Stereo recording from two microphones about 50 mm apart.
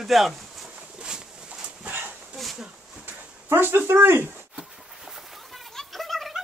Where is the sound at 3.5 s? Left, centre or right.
Right.